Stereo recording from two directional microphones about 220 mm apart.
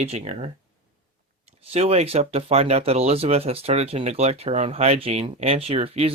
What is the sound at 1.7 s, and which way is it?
Speech, 30° right (ahead or behind).